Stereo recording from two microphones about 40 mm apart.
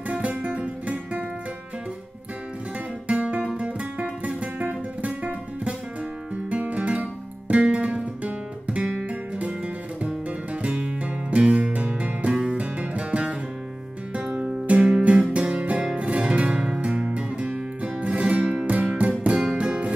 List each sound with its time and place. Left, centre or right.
0.1 s guitar: right
3.1 s guitar: right
3.4 s music: right
10.0 s music: right
18.7 s music: right
19.2 s music: right